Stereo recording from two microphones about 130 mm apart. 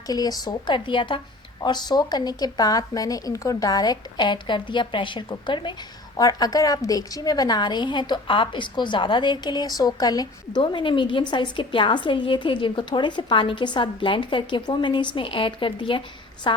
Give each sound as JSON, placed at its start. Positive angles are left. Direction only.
{"t": 0.1, "sound": "a woman's voice", "side_deg": 30}